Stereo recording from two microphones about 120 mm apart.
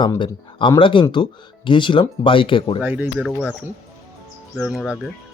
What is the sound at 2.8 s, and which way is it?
Speech, 15° right (ahead or behind).